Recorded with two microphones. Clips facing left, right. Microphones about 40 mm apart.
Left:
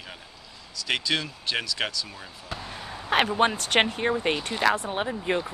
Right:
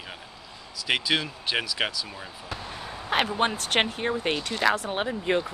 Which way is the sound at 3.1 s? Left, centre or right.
Centre.